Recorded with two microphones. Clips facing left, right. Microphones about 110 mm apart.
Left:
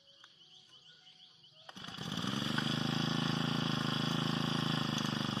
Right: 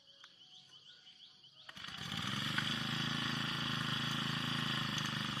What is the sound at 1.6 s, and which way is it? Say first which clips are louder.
Vehicle: left 5 dB; 25° left (ahead or behind).